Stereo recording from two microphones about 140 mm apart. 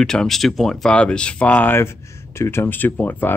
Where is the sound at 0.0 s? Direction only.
5° left (ahead or behind).